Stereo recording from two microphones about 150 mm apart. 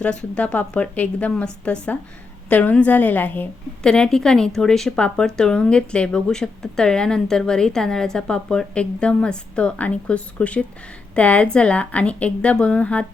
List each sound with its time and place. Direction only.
0.0 s a woman's voice: 5° left (ahead or behind)